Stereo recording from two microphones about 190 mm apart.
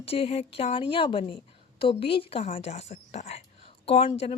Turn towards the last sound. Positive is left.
turn(degrees=30)  # may be behind; listen again after turning